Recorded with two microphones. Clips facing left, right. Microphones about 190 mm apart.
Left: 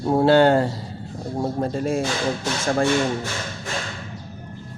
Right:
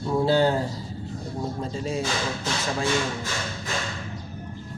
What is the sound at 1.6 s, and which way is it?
Speech, 55° left (ahead or behind).